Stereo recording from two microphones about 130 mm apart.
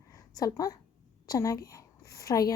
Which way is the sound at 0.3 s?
30° left (ahead or behind).